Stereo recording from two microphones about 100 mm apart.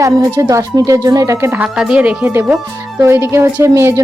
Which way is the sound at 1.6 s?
10° right (ahead or behind).